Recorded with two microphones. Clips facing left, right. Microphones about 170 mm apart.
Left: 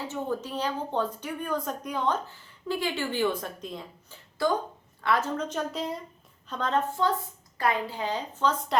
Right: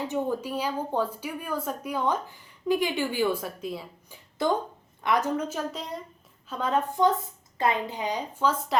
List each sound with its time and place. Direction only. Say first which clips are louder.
0.1 s speech: right 3 dB; 10° right (ahead or behind)
4.4 s speech: right 1 dB; 20° right (ahead or behind)